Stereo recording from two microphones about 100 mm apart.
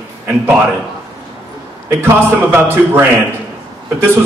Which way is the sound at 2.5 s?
20° right (ahead or behind).